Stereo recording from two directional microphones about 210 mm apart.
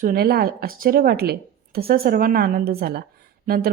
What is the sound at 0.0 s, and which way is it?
A woman's voice, 45° right (ahead or behind).